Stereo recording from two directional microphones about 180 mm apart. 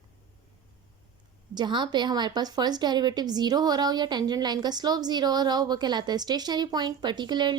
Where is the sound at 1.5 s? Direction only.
25° right (ahead or behind).